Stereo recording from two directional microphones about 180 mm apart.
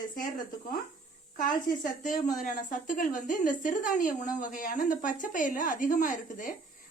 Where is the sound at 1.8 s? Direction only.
45° left (ahead or behind).